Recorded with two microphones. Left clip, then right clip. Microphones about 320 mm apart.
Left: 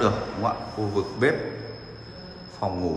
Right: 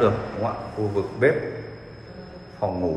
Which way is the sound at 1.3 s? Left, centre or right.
Centre.